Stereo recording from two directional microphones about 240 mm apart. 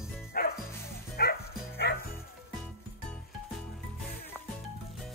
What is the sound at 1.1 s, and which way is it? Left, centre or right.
Music, left.